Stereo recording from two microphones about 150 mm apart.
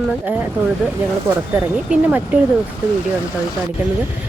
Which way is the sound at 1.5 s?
10° right (ahead or behind).